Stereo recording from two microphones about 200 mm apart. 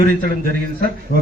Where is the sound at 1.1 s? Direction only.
50° left (ahead or behind).